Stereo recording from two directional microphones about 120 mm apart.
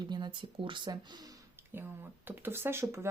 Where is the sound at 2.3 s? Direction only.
20° right (ahead or behind).